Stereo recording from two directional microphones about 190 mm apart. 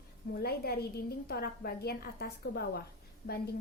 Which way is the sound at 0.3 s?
55° left (ahead or behind).